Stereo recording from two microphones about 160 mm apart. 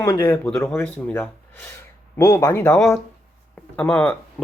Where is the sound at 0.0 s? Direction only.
20° left (ahead or behind).